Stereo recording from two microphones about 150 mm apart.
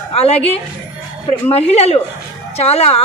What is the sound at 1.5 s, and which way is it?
Speech, 45° left (ahead or behind).